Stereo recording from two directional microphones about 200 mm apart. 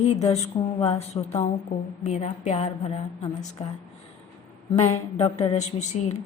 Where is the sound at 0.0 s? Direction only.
35° left (ahead or behind).